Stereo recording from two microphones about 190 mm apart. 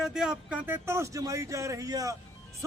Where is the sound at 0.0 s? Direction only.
5° right (ahead or behind).